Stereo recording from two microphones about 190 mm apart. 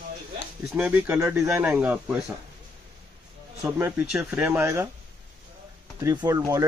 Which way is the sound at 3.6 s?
15° right (ahead or behind).